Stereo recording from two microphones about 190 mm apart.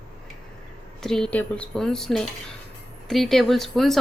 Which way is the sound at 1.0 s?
5° left (ahead or behind).